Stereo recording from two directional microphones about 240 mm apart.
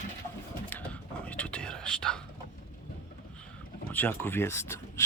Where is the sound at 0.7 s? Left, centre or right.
Centre.